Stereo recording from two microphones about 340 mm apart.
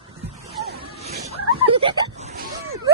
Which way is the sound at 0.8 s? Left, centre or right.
Centre.